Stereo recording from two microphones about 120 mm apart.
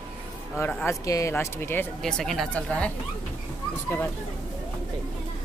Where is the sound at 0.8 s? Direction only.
25° left (ahead or behind).